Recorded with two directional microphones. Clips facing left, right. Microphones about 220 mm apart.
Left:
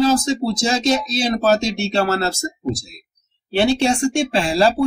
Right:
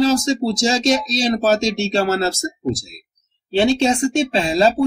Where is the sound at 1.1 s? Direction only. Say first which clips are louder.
Even; 20° right (ahead or behind).